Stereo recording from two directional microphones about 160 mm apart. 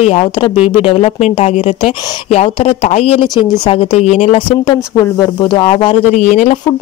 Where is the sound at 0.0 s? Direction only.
35° left (ahead or behind).